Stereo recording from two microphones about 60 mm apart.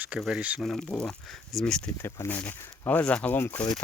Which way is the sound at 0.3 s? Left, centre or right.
Right.